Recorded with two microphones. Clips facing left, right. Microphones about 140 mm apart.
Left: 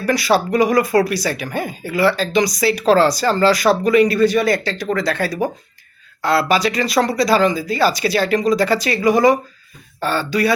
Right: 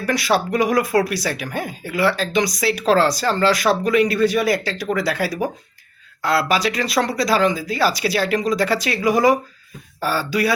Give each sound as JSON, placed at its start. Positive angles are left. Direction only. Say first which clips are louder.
{"t": 0.0, "sound": "speech", "louder": "left 3 dB", "side_deg": 0}